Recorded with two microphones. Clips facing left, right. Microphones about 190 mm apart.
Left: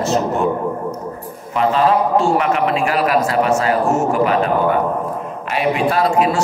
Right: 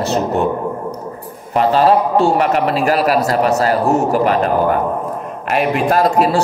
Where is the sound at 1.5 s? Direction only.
35° right (ahead or behind).